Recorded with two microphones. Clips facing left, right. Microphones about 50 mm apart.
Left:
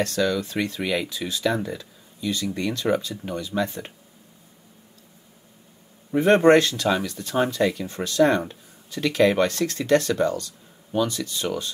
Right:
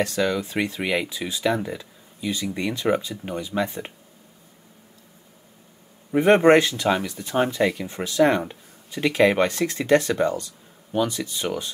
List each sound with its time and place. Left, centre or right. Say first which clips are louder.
0.0 s speech: even; right
6.1 s speech: right 1 dB; right